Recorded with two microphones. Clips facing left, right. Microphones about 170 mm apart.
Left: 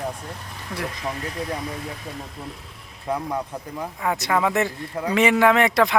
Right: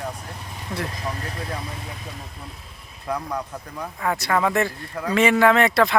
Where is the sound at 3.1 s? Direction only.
25° left (ahead or behind).